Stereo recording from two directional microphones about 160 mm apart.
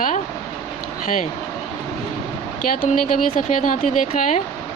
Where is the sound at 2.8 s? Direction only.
50° left (ahead or behind).